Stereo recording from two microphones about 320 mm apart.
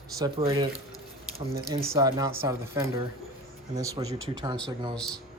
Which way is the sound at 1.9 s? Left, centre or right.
Centre.